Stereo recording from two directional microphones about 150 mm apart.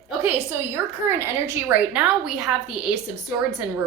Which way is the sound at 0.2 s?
15° right (ahead or behind).